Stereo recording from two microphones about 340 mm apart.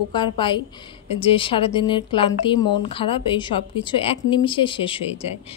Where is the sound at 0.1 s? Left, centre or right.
Centre.